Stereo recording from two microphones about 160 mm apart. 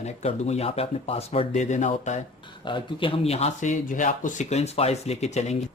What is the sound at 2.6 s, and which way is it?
Speech, 30° left (ahead or behind).